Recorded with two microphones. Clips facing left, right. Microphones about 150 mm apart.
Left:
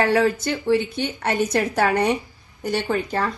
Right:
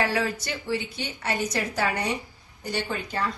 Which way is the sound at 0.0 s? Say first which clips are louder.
Left 7 dB; 50° left (ahead or behind).